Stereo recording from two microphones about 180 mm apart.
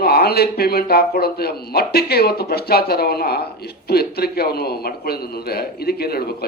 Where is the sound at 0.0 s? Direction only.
60° left (ahead or behind).